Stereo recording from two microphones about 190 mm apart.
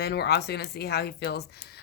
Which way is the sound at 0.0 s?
60° left (ahead or behind).